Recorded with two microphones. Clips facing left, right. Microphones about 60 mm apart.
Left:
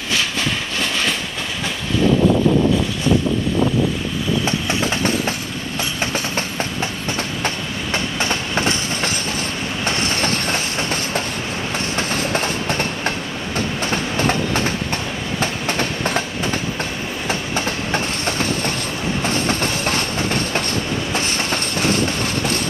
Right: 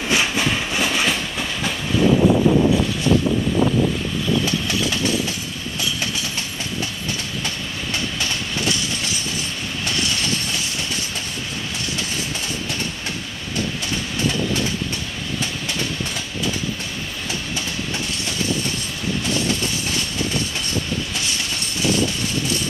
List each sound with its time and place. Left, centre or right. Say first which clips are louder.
0.1 s train: right 1 dB; centre
4.5 s train: left 2 dB; left
7.4 s train: left 4 dB; left
17.3 s train: left 6 dB; left
21.1 s train: left 5 dB; left